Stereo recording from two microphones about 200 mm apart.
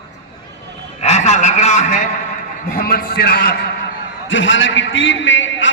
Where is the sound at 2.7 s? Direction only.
50° left (ahead or behind).